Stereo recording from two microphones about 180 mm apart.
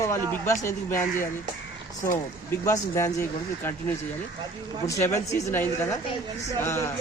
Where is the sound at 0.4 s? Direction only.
15° left (ahead or behind).